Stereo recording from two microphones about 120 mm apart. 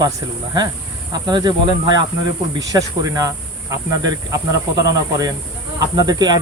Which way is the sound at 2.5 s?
30° right (ahead or behind).